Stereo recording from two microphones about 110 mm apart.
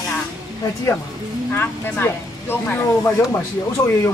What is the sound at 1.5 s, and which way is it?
Speech, 20° left (ahead or behind).